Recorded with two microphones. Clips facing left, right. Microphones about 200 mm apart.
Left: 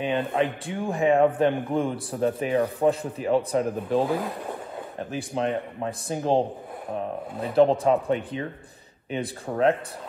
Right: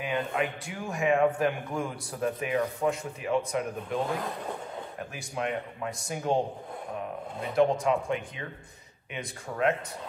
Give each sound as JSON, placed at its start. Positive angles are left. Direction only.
{"t": 0.0, "sound": "a man's voice", "side_deg": 30}
{"t": 5.1, "sound": "a man's voice", "side_deg": 30}
{"t": 7.5, "sound": "a man's voice", "side_deg": 35}
{"t": 9.5, "sound": "a man's voice", "side_deg": 35}